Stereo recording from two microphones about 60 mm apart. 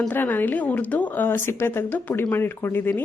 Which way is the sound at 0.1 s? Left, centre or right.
Left.